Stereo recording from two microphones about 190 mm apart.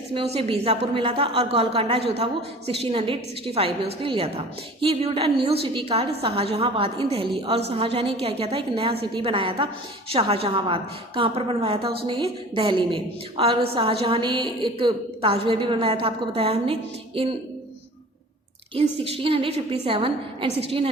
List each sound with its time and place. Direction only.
0.1 s a woman's voice: 30° right (ahead or behind)
18.7 s a woman's voice: 30° right (ahead or behind)